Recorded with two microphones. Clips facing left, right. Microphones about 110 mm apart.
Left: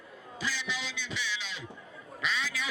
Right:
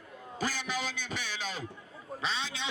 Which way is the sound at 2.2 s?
30° right (ahead or behind).